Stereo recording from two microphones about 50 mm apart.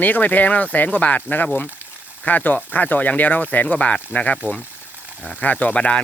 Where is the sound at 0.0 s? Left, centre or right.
Left.